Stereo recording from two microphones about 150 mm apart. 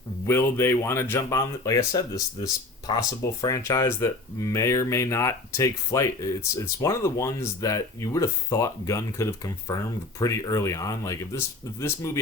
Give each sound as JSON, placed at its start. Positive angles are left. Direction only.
{"t": 0.3, "sound": "speech", "side_deg": 15}